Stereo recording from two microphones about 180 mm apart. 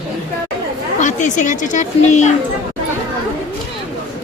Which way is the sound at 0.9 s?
45° left (ahead or behind).